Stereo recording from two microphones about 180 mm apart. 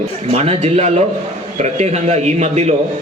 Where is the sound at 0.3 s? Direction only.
35° right (ahead or behind).